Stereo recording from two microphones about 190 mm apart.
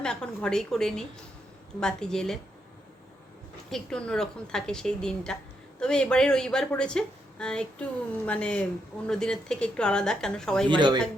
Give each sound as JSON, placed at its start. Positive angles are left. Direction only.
{"t": 0.0, "sound": "a woman's voice", "side_deg": 5}
{"t": 3.7, "sound": "a woman's voice", "side_deg": 5}
{"t": 10.7, "sound": "speech", "side_deg": -25}